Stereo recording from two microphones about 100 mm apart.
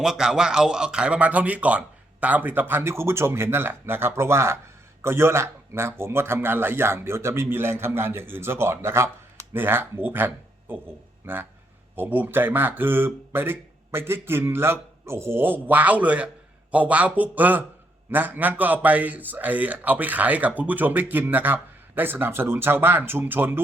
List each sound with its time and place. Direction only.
0.0 s a man's voice: 5° right (ahead or behind)